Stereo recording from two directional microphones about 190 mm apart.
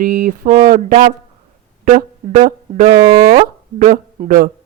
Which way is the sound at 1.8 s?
45° right (ahead or behind).